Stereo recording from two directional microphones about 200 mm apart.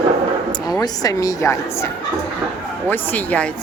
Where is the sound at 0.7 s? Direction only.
20° left (ahead or behind).